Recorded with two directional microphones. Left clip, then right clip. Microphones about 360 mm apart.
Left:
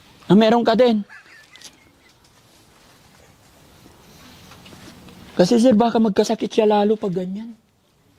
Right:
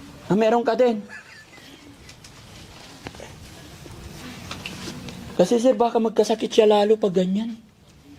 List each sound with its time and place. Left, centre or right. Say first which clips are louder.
0.3 s speech: left 4 dB; left
5.5 s speech: left 3 dB; left